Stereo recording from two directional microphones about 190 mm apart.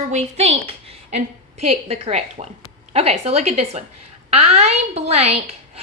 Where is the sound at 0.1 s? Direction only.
35° right (ahead or behind).